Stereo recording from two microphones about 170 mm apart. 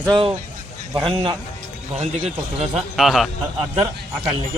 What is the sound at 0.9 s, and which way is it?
Speech, 25° right (ahead or behind).